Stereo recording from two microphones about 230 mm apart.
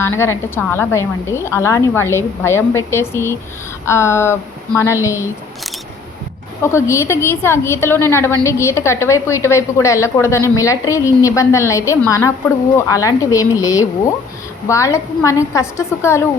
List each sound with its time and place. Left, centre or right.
0.0 s a woman's voice: centre
6.6 s a woman's voice: centre